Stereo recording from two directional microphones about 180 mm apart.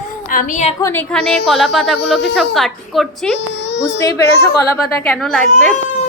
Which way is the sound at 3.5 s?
80° left.